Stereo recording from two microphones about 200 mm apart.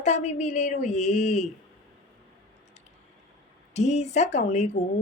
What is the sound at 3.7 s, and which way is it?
Speech, 35° left (ahead or behind).